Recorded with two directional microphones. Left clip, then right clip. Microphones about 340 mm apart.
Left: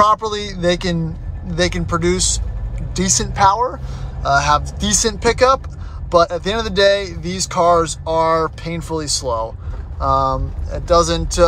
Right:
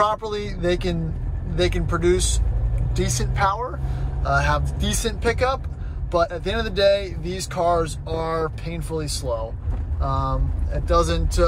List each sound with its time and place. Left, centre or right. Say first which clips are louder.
0.0 s speech: left 7 dB; centre